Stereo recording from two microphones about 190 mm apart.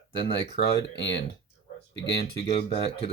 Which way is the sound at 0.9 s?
65° left (ahead or behind).